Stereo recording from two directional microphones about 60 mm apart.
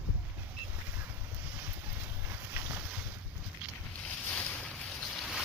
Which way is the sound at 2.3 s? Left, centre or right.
Right.